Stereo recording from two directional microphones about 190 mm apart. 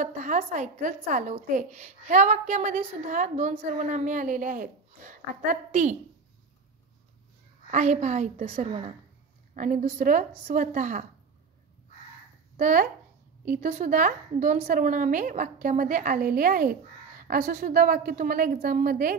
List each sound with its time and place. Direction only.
0.0 s a woman's voice: 40° right (ahead or behind)
7.7 s a woman's voice: 40° right (ahead or behind)
9.6 s a woman's voice: 40° right (ahead or behind)
12.5 s a woman's voice: 40° right (ahead or behind)